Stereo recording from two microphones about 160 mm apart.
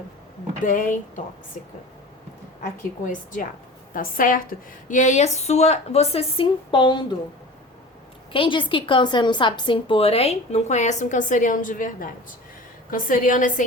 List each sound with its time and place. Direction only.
0.6 s a woman's voice: 55° left (ahead or behind)
4.9 s a woman's voice: 50° left (ahead or behind); by 7.2 s 30° left (ahead or behind)
8.3 s a woman's voice: 30° left (ahead or behind); by 13.7 s 55° left (ahead or behind)